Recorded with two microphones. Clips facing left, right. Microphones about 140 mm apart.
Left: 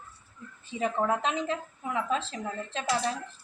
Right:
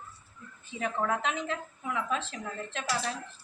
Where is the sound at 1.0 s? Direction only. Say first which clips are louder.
Left 2 dB; 25° left (ahead or behind).